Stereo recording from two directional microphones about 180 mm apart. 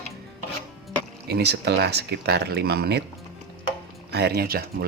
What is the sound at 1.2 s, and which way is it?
Speech, 65° right (ahead or behind).